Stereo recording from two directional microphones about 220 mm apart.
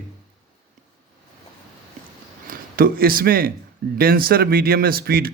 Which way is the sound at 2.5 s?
40° right (ahead or behind).